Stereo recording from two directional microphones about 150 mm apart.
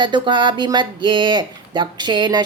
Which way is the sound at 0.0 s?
30° right (ahead or behind).